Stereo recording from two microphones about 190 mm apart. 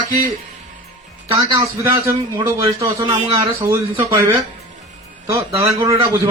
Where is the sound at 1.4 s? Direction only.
20° right (ahead or behind).